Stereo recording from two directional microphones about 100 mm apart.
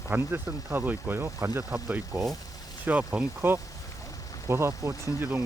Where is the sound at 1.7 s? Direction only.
15° right (ahead or behind).